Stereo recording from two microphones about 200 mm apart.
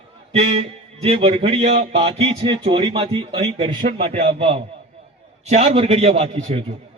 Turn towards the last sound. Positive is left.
turn(degrees=-30)  # may be behind; listen again after turning